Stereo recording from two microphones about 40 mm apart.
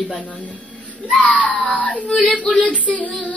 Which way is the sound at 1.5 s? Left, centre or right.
Left.